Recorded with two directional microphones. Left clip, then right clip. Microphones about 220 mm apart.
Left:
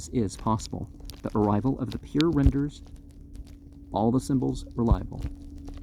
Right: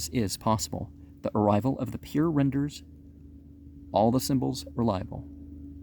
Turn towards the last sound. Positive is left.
turn(degrees=-30)  # may be behind; listen again after turning